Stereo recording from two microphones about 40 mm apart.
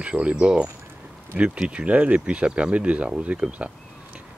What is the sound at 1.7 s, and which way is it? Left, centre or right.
Speech, right.